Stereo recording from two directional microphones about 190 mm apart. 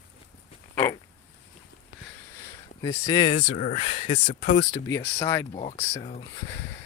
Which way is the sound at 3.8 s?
30° left (ahead or behind).